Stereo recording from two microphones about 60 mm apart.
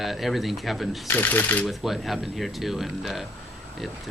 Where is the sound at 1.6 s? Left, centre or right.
Centre.